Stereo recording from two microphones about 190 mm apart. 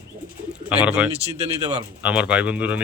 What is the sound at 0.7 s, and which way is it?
Speech, 5° right (ahead or behind).